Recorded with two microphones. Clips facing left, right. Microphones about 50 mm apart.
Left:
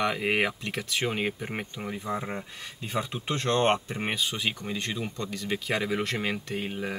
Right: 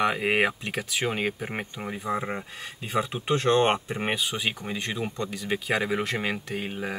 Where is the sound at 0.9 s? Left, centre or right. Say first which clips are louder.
Right 1 dB; centre.